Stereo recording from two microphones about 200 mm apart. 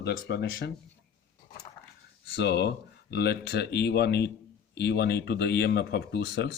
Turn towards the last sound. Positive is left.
turn(degrees=55)  # may be behind; listen again after turning